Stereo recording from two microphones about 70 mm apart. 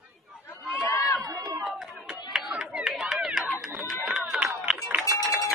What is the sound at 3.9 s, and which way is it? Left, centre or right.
Music, centre.